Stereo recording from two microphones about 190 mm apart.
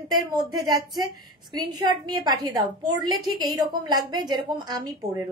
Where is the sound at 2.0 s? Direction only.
20° right (ahead or behind).